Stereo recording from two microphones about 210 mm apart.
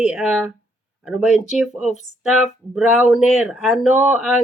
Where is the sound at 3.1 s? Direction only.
Centre (ahead or behind).